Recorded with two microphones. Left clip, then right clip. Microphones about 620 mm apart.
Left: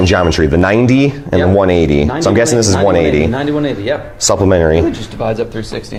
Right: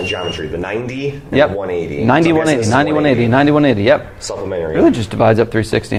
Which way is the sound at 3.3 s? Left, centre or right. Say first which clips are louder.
Right 4 dB; right.